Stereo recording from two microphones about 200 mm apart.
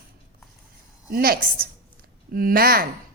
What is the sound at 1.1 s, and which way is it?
A woman's voice, 50° right (ahead or behind).